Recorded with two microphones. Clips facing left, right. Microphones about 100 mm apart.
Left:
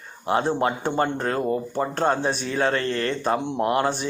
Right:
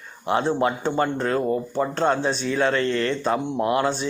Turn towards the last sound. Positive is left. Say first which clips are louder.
# even
turn(degrees=45)  # may be behind; listen again after turning